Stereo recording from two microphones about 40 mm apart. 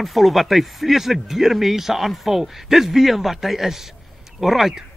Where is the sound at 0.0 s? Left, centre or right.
Centre.